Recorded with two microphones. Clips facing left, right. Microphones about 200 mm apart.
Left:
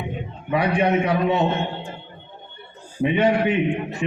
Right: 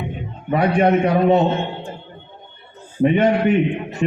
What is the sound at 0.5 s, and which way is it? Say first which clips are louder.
Speech: right 4 dB; 50° right (ahead or behind).